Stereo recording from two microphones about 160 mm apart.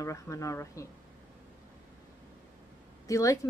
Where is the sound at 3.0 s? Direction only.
20° left (ahead or behind).